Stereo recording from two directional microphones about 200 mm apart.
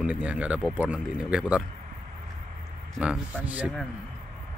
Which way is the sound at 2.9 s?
5° right (ahead or behind).